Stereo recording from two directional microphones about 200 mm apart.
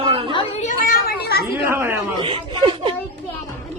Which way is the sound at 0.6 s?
45° left (ahead or behind).